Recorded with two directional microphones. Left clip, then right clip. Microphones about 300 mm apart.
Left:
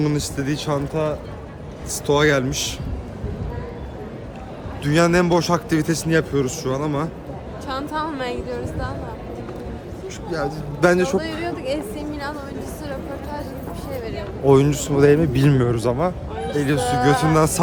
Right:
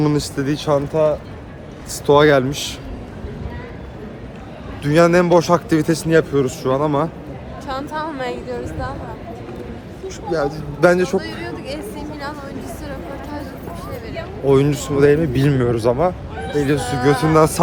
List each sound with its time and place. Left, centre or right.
0.0 s a man's voice: centre
4.8 s a man's voice: centre
7.7 s a man's voice: centre
10.3 s a man's voice: centre
11.2 s speech: left
14.4 s a man's voice: centre